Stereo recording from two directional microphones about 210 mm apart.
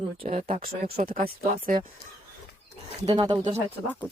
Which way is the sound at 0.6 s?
45° right (ahead or behind).